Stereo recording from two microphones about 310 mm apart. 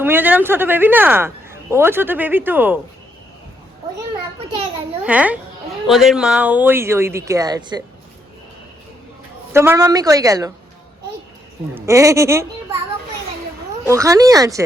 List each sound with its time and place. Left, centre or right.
0.0 s speech: centre
4.4 s speech: centre
5.0 s a child's voice: centre
9.5 s speech: centre
11.7 s speech: centre
13.8 s speech: centre